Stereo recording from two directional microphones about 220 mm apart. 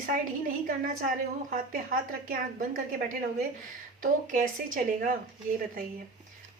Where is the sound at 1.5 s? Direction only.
40° right (ahead or behind).